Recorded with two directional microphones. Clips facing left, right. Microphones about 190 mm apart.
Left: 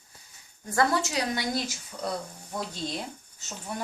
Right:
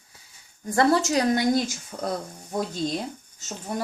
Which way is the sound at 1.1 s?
50° right (ahead or behind).